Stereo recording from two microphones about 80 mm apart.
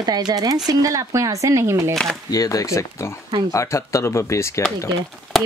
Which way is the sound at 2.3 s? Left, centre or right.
Left.